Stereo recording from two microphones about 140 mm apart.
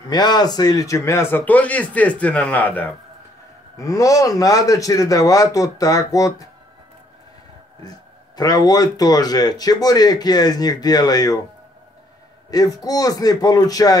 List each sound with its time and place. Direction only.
0.1 s speech: 30° left (ahead or behind); by 2.9 s 15° left (ahead or behind)
3.7 s speech: 25° left (ahead or behind)
8.4 s speech: 30° left (ahead or behind)
12.4 s a man's voice: 25° left (ahead or behind)